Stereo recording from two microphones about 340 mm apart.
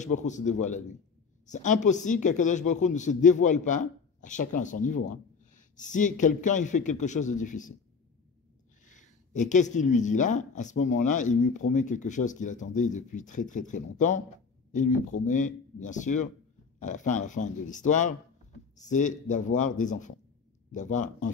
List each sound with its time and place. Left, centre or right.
0.0 s a man's voice: left
8.8 s a man's voice: left